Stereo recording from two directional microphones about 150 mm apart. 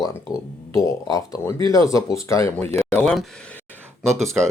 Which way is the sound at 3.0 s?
5° left (ahead or behind).